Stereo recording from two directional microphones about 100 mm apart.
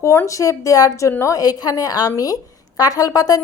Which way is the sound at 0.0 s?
30° left (ahead or behind).